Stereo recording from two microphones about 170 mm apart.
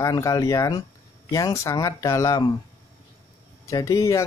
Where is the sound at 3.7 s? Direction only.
20° left (ahead or behind).